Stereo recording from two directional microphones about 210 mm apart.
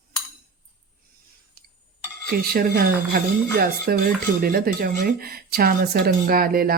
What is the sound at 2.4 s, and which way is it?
Speech, 45° right (ahead or behind).